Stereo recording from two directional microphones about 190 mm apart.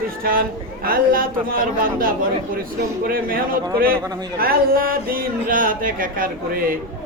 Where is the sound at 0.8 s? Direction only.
50° right (ahead or behind).